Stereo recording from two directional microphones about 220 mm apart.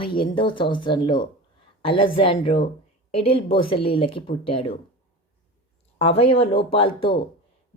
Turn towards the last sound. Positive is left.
turn(degrees=25)  # may be behind; listen again after turning